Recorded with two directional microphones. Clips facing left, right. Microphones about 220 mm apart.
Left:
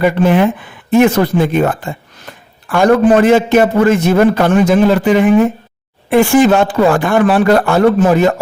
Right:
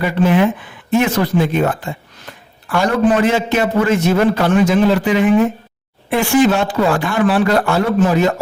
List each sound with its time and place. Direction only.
0.0 s a man's voice: 50° left (ahead or behind)